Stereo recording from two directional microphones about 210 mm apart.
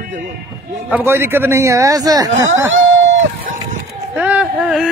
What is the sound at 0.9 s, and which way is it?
A man's voice, 10° right (ahead or behind).